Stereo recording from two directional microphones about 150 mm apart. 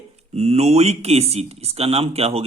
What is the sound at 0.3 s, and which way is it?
Speech, 45° right (ahead or behind).